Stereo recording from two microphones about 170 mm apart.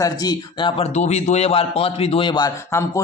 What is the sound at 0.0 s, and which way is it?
Speech, 20° left (ahead or behind).